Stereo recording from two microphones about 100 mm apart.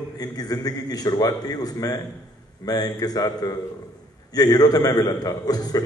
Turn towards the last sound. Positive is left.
turn(degrees=40)  # may be behind; listen again after turning